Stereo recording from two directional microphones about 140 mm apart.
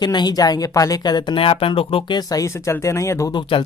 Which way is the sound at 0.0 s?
30° left (ahead or behind).